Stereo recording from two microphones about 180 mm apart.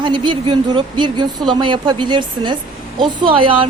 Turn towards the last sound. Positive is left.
turn(degrees=-30)  # may be behind; listen again after turning